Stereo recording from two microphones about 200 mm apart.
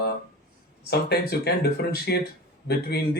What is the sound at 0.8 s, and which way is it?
Speech, 55° left (ahead or behind).